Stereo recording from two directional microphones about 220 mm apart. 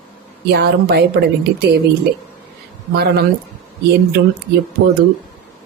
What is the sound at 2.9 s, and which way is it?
Speech, 45° right (ahead or behind).